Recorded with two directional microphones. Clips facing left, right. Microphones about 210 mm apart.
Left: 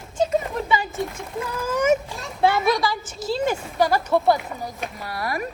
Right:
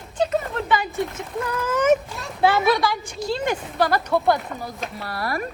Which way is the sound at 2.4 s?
Centre (ahead or behind).